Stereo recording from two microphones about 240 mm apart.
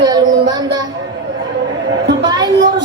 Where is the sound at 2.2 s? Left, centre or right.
Centre.